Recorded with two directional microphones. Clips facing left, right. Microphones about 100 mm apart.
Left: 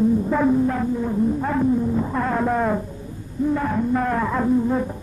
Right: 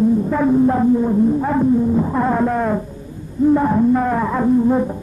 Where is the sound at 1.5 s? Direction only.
10° right (ahead or behind).